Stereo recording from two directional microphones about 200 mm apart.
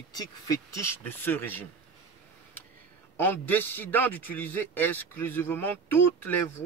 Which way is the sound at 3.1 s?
10° left (ahead or behind).